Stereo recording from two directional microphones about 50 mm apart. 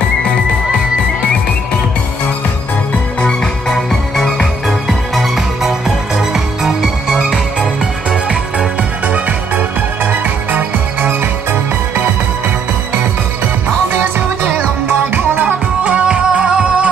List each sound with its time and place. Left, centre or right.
3.6 s music: centre
4.6 s music: centre
9.0 s music: right
15.4 s music: right